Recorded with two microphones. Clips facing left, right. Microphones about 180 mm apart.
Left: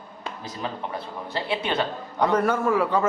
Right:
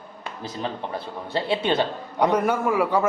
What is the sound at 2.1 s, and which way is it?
Speech, 15° right (ahead or behind).